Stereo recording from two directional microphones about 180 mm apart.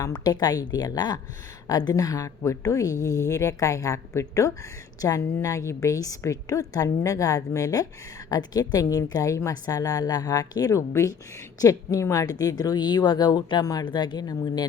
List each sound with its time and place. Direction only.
0.0 s a woman's voice: 20° left (ahead or behind)